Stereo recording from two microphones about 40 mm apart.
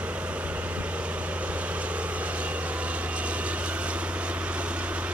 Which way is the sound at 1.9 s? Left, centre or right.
Right.